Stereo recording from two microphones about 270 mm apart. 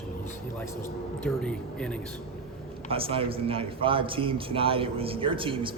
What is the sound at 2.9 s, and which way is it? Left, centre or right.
A man's voice, centre.